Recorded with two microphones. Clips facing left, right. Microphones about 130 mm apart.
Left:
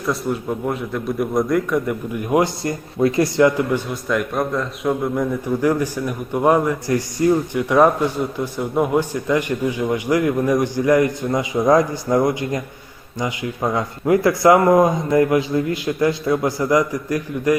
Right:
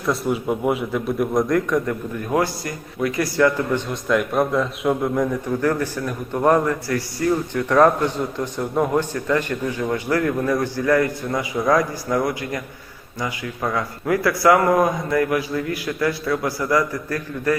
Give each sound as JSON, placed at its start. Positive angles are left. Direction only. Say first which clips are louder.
{"t": 0.0, "sound": "a man's voice", "louder": "right 1 dB", "side_deg": 0}
{"t": 4.1, "sound": "a man's voice", "louder": "right 2 dB", "side_deg": 0}
{"t": 5.6, "sound": "a man's voice", "louder": "left 3 dB", "side_deg": 15}